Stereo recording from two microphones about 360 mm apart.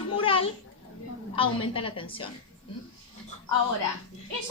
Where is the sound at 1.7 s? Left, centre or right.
Centre.